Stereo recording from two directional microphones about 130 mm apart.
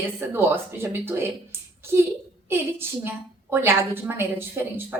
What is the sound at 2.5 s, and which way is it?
A woman's voice, 20° right (ahead or behind).